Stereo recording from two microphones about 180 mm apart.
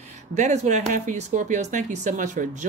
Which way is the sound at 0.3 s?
40° right (ahead or behind).